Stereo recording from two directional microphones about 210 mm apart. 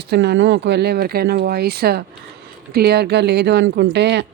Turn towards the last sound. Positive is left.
turn(degrees=-55)  # may be behind; listen again after turning